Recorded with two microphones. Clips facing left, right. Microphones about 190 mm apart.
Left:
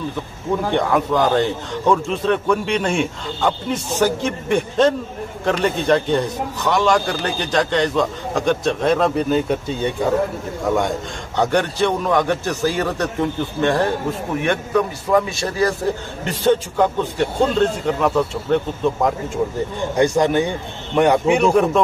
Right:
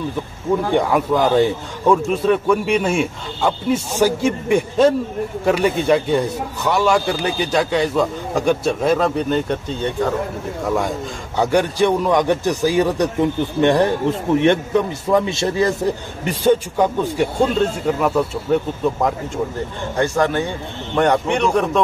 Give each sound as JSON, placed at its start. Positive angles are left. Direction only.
{"t": 0.7, "sound": "a man's voice", "side_deg": -10}
{"t": 11.3, "sound": "a man's voice", "side_deg": -10}
{"t": 16.3, "sound": "a man's voice", "side_deg": -10}
{"t": 20.0, "sound": "a man's voice", "side_deg": 15}